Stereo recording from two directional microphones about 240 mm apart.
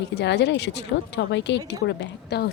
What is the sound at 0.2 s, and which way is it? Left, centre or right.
A woman's voice, left.